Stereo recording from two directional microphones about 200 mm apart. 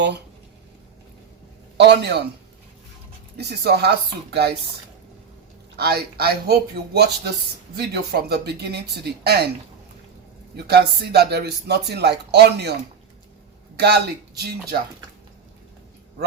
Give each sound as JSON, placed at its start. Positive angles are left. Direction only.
{"t": 1.8, "sound": "speech", "side_deg": -55}
{"t": 3.3, "sound": "speech", "side_deg": -55}
{"t": 5.7, "sound": "speech", "side_deg": -50}
{"t": 10.7, "sound": "speech", "side_deg": -55}
{"t": 13.7, "sound": "speech", "side_deg": -55}